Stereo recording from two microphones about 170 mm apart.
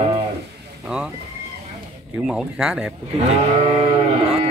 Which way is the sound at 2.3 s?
5° right (ahead or behind).